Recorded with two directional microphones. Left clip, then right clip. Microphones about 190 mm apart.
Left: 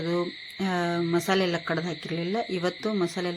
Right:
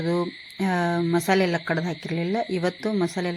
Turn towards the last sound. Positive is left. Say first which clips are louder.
# right 2 dB
turn(degrees=-15)  # may be behind; listen again after turning